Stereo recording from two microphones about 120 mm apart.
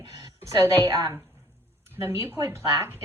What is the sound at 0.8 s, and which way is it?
A woman's voice, 25° right (ahead or behind).